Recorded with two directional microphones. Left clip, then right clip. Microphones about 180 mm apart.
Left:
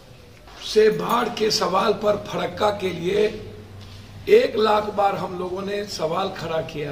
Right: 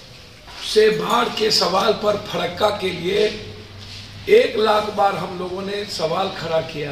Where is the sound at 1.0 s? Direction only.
15° left (ahead or behind).